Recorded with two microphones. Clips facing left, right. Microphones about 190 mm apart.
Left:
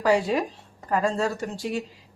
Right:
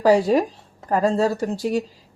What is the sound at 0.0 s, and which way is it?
Speech, 40° right (ahead or behind).